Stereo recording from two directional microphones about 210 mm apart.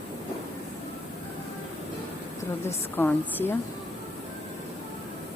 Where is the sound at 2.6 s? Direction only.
10° left (ahead or behind).